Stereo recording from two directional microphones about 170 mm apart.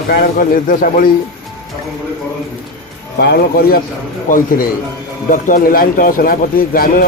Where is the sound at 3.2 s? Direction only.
70° left (ahead or behind).